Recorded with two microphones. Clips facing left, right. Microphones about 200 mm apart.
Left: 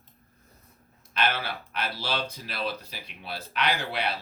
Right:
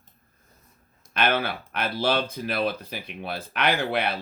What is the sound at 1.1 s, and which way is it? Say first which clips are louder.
Speech: right 5 dB; 55° right (ahead or behind).